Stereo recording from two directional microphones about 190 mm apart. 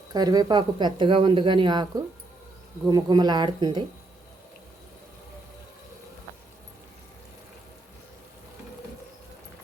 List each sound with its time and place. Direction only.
0.1 s speech: 20° right (ahead or behind)